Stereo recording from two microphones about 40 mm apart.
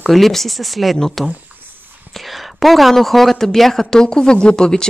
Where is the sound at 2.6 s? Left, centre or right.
Centre.